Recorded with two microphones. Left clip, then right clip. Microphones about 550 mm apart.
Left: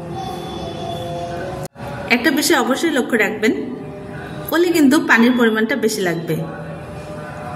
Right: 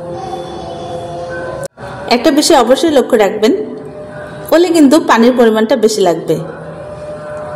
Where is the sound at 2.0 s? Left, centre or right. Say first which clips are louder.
Right 6 dB; left.